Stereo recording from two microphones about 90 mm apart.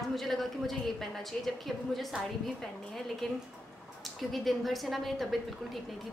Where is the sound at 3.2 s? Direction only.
5° left (ahead or behind).